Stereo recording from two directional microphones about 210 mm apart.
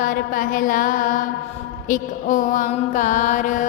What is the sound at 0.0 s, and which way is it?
Music, 40° left (ahead or behind).